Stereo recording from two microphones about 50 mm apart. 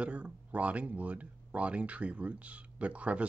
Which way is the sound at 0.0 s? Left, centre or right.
Right.